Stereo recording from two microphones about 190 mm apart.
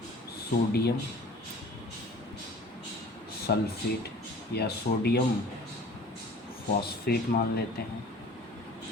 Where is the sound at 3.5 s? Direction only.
60° left (ahead or behind).